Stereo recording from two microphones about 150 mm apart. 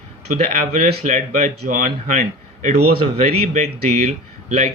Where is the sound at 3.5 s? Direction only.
50° right (ahead or behind).